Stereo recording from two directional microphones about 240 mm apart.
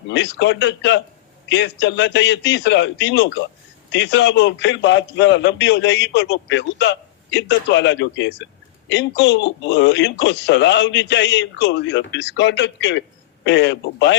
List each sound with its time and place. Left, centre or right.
0.1 s a man's voice: left